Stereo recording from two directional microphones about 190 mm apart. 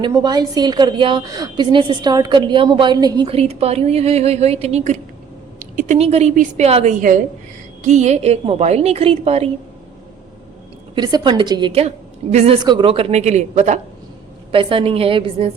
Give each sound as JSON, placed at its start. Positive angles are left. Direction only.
{"t": 0.0, "sound": "a woman's voice", "side_deg": -20}
{"t": 10.9, "sound": "a woman's voice", "side_deg": -25}